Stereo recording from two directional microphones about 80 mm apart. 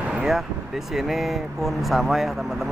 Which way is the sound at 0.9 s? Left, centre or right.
Centre.